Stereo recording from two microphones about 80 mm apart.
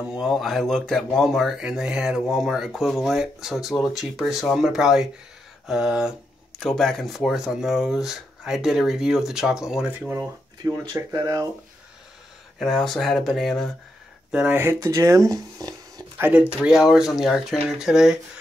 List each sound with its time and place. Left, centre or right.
0.1 s speech: centre
6.6 s speech: centre
9.8 s speech: right
10.6 s speech: right
12.5 s speech: centre
14.5 s speech: right
14.8 s speech: right
16.2 s speech: centre